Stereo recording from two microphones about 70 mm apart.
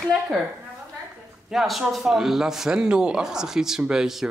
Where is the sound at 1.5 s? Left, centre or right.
Centre.